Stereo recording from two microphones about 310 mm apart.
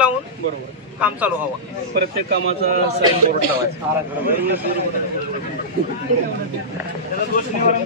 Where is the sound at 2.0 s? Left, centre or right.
Right.